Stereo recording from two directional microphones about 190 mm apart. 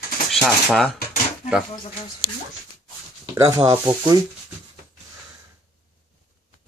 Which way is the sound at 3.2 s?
15° right (ahead or behind).